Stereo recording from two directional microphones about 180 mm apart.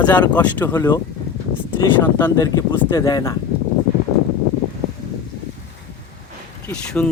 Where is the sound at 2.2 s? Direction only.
20° left (ahead or behind).